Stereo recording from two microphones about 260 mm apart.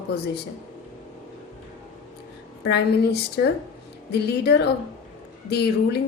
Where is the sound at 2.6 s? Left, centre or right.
Left.